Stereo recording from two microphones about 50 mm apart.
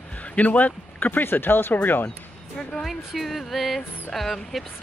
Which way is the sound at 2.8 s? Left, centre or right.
Centre.